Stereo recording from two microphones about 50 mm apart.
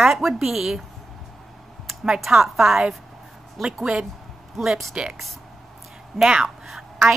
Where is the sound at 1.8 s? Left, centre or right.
Centre.